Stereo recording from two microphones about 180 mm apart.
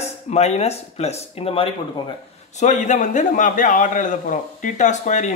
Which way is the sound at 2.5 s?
40° left (ahead or behind).